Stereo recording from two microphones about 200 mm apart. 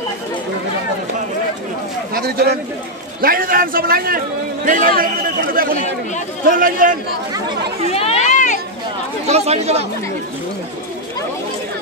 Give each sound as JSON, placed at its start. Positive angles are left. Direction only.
{"t": 2.1, "sound": "a man's voice", "side_deg": -50}
{"t": 7.9, "sound": "a sound", "side_deg": 30}
{"t": 9.2, "sound": "speech", "side_deg": -30}